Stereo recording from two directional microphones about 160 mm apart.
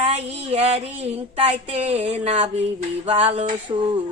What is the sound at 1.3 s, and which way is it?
Speech, 40° right (ahead or behind).